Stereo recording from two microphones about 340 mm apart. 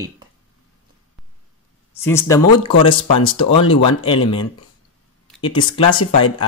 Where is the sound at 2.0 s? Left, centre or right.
Centre.